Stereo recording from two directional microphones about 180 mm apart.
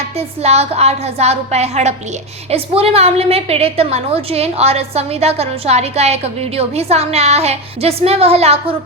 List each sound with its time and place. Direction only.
0.4 s a woman's voice: 35° right (ahead or behind)